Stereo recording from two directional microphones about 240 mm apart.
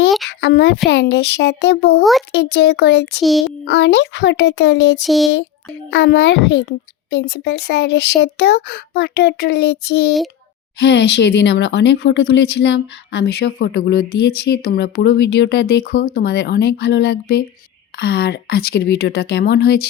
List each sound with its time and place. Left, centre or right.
0.3 s speech: left
3.2 s speech: centre
3.7 s speech: left
5.0 s speech: centre
5.9 s speech: left